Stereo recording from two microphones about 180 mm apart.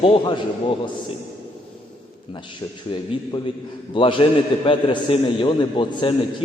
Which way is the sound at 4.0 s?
30° left (ahead or behind).